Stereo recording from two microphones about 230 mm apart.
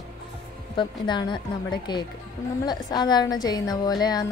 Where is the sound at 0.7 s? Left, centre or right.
Centre.